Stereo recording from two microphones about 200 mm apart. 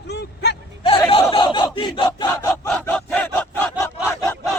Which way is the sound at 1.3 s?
25° left (ahead or behind).